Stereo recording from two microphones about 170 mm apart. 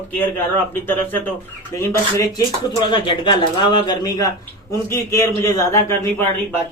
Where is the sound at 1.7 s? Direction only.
15° left (ahead or behind).